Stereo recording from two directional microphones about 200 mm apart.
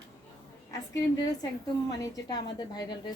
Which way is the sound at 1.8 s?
20° left (ahead or behind).